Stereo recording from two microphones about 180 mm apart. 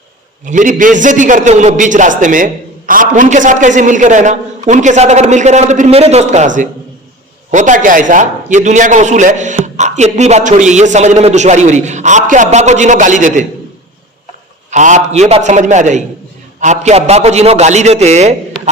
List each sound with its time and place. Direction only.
0.4 s a man's voice: 45° right (ahead or behind)
14.7 s a man's voice: 40° right (ahead or behind)